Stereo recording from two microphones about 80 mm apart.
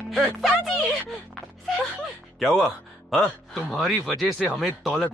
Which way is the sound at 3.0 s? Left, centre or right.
Centre.